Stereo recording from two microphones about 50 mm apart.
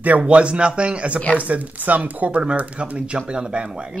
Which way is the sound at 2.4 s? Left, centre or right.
Centre.